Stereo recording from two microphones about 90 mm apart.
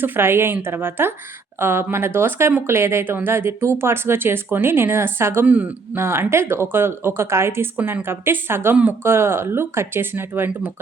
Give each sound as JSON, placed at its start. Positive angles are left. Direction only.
{"t": 0.0, "sound": "speech", "side_deg": -25}
{"t": 5.5, "sound": "speech", "side_deg": -15}
{"t": 6.0, "sound": "speech", "side_deg": -30}